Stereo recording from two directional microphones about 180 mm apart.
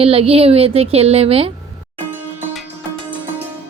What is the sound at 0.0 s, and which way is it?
A woman's voice, 30° right (ahead or behind).